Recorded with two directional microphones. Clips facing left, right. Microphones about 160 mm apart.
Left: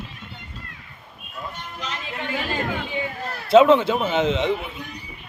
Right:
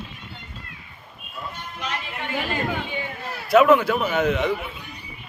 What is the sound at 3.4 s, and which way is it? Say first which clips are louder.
A man's voice: left 2 dB; 25° left (ahead or behind).